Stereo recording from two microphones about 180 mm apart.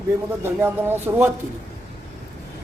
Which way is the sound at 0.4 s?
15° right (ahead or behind).